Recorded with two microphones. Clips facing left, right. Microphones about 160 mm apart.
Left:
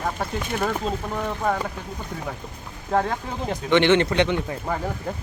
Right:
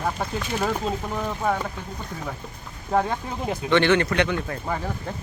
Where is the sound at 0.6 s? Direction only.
5° right (ahead or behind).